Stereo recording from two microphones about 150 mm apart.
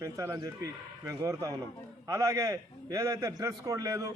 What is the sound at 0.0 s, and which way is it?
A man's voice, 20° right (ahead or behind).